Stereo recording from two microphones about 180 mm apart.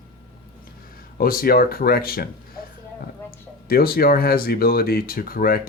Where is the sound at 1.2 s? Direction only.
55° left (ahead or behind).